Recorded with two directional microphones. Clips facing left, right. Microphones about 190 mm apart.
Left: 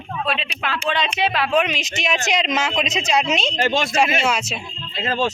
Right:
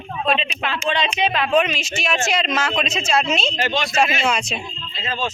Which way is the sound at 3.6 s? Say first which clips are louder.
Left 2 dB; 50° left (ahead or behind).